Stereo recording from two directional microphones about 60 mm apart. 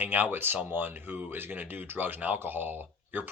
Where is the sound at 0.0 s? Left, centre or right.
Right.